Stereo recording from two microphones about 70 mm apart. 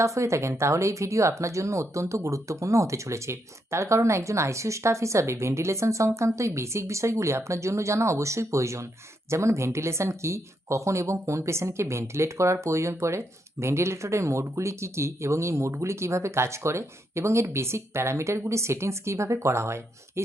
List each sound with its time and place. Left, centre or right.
0.0 s speech: right